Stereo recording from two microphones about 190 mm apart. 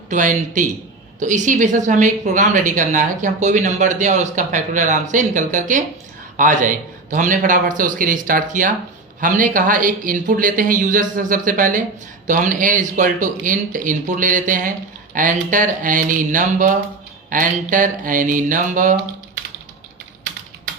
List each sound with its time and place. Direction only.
0.1 s a woman's voice: 40° right (ahead or behind)